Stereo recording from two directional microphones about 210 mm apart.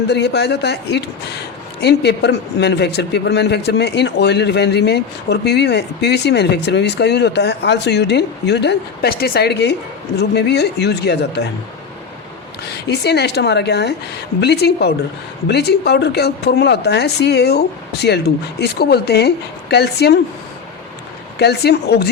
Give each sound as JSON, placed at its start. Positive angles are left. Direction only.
{"t": 0.1, "sound": "a man's voice", "side_deg": 55}
{"t": 12.6, "sound": "a man's voice", "side_deg": 55}
{"t": 21.3, "sound": "a man's voice", "side_deg": 50}